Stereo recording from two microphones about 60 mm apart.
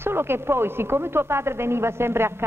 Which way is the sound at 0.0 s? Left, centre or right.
Right.